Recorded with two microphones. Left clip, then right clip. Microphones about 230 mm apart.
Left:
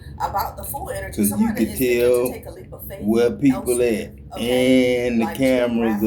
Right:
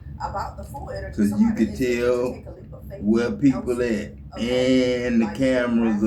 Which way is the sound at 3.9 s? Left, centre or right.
Centre.